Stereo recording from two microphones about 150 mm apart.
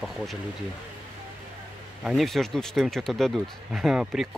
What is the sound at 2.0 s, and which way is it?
Speech, centre (ahead or behind).